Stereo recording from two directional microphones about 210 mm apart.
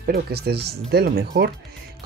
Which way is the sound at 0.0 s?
50° right (ahead or behind).